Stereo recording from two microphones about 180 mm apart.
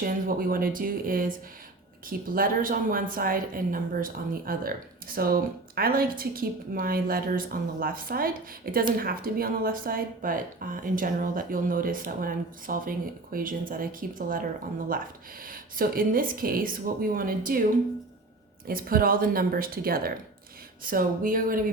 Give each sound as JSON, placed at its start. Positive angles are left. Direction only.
{"t": 0.0, "sound": "a woman's voice", "side_deg": -50}
{"t": 15.4, "sound": "a woman's voice", "side_deg": -50}
{"t": 18.7, "sound": "a woman's voice", "side_deg": -55}